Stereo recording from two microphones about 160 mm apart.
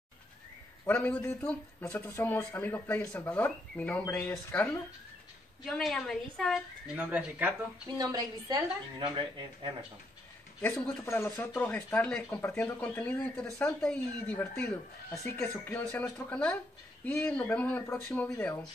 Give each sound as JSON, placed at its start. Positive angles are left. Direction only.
{"t": 0.8, "sound": "a woman's voice", "side_deg": 10}
{"t": 7.0, "sound": "speech", "side_deg": -10}
{"t": 8.0, "sound": "a woman's voice", "side_deg": -25}
{"t": 10.6, "sound": "speech", "side_deg": 15}